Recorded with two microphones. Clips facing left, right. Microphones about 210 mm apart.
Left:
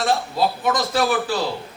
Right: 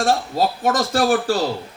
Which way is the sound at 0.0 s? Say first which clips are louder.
Right 2 dB; 45° right (ahead or behind).